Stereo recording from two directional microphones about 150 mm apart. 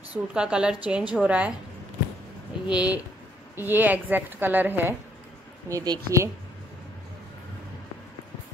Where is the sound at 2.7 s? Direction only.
5° right (ahead or behind).